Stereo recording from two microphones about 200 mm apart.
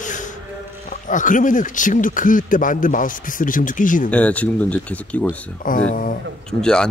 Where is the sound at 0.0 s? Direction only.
40° left (ahead or behind).